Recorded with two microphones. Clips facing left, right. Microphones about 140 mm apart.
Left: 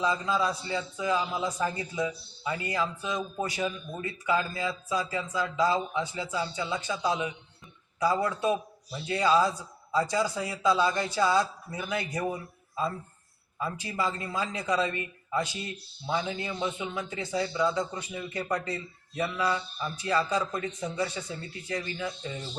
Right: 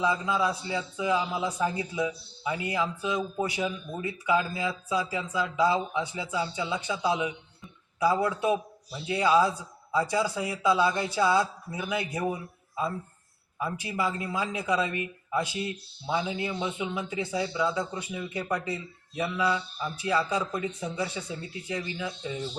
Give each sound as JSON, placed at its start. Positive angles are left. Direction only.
{"t": 0.0, "sound": "a man's voice", "side_deg": -10}